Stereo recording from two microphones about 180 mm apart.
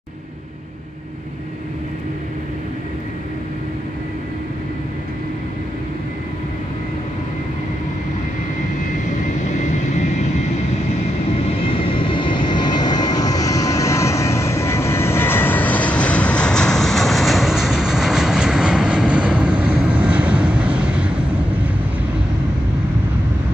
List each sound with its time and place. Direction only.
9.6 s vehicle: 40° left (ahead or behind)
11.3 s vehicle: 30° left (ahead or behind); by 21.1 s 5° right (ahead or behind)